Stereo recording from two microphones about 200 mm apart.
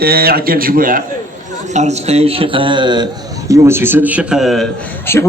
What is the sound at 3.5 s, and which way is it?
A man's voice, 10° right (ahead or behind).